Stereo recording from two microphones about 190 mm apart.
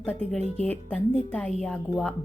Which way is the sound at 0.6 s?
5° left (ahead or behind).